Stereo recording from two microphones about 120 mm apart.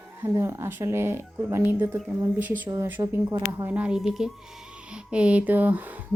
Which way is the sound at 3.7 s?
10° right (ahead or behind).